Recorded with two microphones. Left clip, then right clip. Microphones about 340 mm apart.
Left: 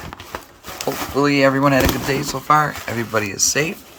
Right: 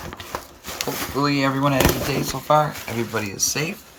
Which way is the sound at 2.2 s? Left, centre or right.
Left.